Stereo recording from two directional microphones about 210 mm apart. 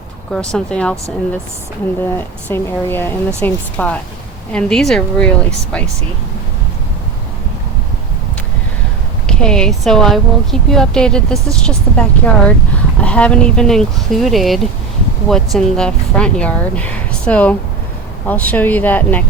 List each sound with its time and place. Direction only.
0.3 s speech: 5° left (ahead or behind)
2.0 s a woman's voice: 10° left (ahead or behind)
9.2 s a woman's voice: 5° left (ahead or behind)